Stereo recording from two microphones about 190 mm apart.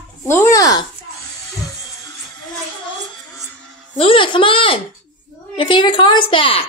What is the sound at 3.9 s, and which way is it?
A woman's voice, 30° left (ahead or behind).